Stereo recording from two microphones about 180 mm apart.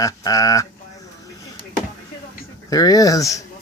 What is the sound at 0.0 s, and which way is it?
Speech, 20° left (ahead or behind).